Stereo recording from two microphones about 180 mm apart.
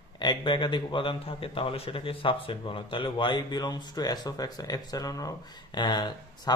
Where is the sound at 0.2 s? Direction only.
25° left (ahead or behind).